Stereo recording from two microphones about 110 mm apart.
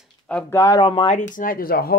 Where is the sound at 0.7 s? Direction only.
45° left (ahead or behind).